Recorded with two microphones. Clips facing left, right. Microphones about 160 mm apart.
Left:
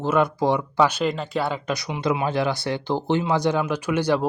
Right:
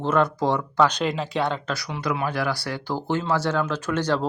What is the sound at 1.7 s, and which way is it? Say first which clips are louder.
Speech: left 3 dB; 20° left (ahead or behind).